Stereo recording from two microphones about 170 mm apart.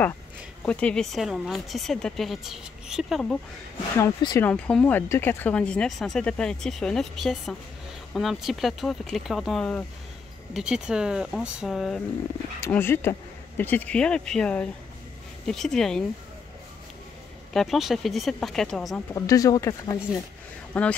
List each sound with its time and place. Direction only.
0.7 s speech: 5° left (ahead or behind)
4.0 s speech: 20° left (ahead or behind)
4.5 s speech: 5° left (ahead or behind)
12.5 s speech: 15° left (ahead or behind)
17.5 s speech: centre (ahead or behind)
19.1 s speech: 20° left (ahead or behind)
20.7 s speech: 5° left (ahead or behind)